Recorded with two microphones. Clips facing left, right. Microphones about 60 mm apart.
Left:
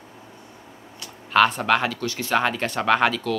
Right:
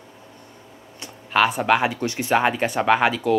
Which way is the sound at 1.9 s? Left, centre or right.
Right.